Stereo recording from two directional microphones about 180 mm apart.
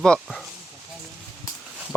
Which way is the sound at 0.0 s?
5° left (ahead or behind).